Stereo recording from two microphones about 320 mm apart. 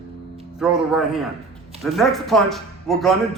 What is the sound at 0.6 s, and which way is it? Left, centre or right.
A man's voice, centre.